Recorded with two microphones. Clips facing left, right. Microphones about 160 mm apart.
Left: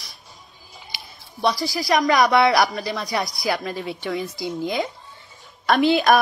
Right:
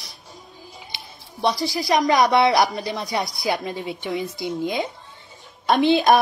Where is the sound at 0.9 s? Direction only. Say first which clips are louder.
Right 1 dB; 25° right (ahead or behind).